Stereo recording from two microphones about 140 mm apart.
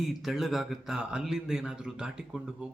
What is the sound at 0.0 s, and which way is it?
Speech, centre (ahead or behind).